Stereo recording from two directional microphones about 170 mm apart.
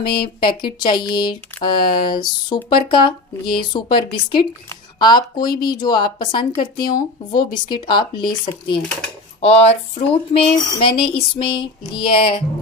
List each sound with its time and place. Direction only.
0.0 s speech: 70° left (ahead or behind)
0.7 s speech: 25° left (ahead or behind)